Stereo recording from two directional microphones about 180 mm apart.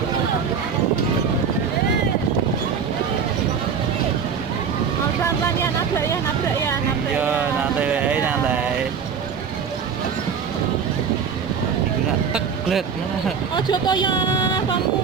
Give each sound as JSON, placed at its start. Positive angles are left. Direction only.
{"t": 7.2, "sound": "a sound", "side_deg": -10}
{"t": 12.3, "sound": "vehicle", "side_deg": 0}
{"t": 13.5, "sound": "speech", "side_deg": 25}